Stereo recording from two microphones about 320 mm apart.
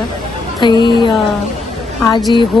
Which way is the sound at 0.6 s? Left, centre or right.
Centre.